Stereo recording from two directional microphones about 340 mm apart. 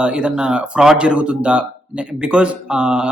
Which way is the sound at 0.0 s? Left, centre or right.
Centre.